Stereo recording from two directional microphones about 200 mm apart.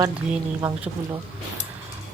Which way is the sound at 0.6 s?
5° right (ahead or behind).